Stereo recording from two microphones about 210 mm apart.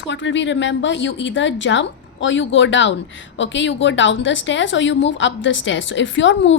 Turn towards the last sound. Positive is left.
turn(degrees=60)  # may be behind; listen again after turning